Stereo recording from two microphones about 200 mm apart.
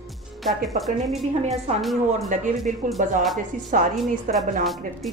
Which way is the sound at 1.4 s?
35° right (ahead or behind).